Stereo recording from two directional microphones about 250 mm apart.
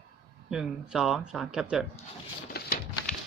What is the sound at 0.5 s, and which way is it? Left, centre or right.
Speech, centre.